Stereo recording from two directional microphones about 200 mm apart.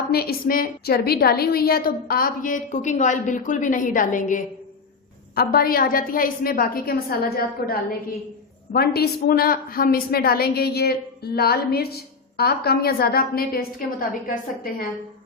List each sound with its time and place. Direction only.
0.1 s a woman's voice: 50° left (ahead or behind)